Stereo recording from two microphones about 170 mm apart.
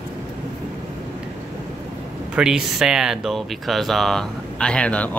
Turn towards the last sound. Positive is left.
turn(degrees=5)  # may be behind; listen again after turning